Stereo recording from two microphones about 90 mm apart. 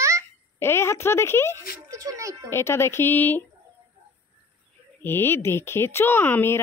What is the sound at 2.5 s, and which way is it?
Speech, 30° left (ahead or behind).